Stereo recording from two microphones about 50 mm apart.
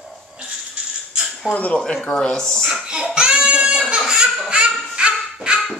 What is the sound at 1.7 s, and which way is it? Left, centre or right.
Speech, centre.